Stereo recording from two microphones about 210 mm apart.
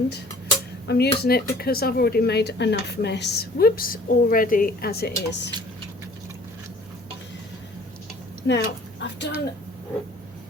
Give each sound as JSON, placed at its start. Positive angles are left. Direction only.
{"t": 0.9, "sound": "speech", "side_deg": 50}
{"t": 8.4, "sound": "speech", "side_deg": 55}